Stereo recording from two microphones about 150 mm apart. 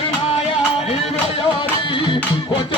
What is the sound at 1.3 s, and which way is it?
Music, 35° left (ahead or behind).